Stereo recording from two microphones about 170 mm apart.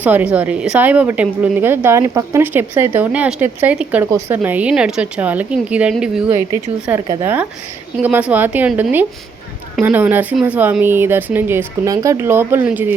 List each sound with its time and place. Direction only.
0.0 s a woman's voice: 10° right (ahead or behind)
7.1 s a woman's voice: 15° right (ahead or behind)